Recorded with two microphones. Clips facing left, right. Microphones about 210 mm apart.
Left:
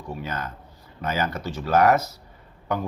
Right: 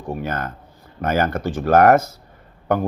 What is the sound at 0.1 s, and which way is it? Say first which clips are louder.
Speech: right 6 dB; 55° right (ahead or behind).